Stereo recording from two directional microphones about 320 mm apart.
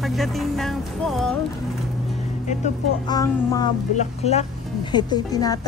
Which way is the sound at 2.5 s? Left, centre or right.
Left.